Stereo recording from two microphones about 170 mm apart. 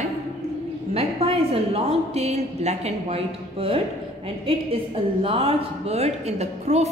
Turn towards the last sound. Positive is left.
turn(degrees=-40)  # may be behind; listen again after turning